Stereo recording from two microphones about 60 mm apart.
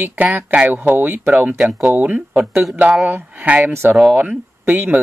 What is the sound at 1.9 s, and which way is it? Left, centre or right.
Speech, right.